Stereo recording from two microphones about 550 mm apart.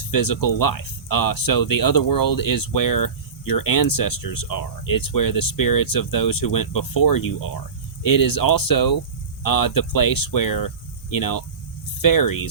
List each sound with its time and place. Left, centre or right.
0.1 s speech: left